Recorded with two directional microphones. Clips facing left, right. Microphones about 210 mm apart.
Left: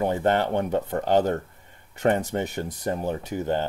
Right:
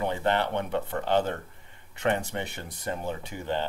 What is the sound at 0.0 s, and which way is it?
Speech, 45° left (ahead or behind).